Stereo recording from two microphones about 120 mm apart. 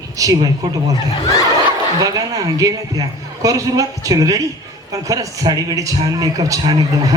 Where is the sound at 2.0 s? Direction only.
30° right (ahead or behind).